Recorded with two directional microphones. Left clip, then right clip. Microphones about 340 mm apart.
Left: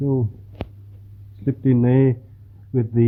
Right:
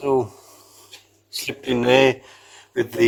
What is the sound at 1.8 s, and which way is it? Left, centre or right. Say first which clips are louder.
Speech: right 7 dB; centre.